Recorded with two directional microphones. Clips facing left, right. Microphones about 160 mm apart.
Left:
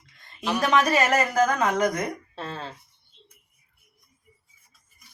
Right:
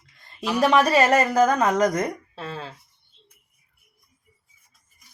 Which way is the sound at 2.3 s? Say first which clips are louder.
Right 1 dB; 5° right (ahead or behind).